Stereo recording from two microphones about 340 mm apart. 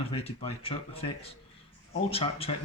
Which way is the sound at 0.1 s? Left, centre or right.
Centre.